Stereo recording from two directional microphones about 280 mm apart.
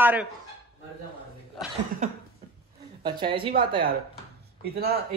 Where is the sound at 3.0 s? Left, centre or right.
Centre.